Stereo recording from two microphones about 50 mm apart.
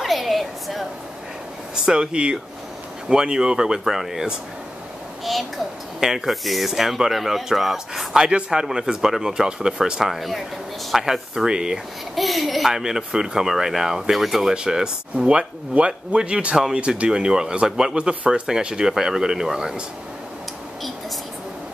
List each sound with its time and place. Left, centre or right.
0.0 s a sound: centre
1.9 s speech: centre
5.9 s speech: centre
8.2 s speech: centre
12.2 s speech: centre
14.5 s speech: centre